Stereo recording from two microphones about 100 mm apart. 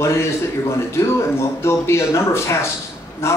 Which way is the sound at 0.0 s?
30° left (ahead or behind).